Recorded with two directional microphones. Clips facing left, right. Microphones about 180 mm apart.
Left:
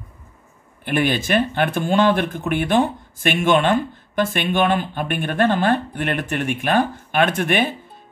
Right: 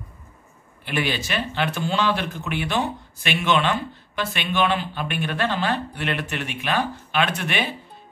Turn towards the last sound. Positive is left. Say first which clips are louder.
# left 6 dB
turn(degrees=50)  # may be behind; listen again after turning